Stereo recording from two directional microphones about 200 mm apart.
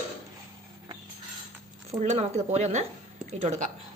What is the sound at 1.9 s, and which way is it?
A woman's voice, 30° right (ahead or behind).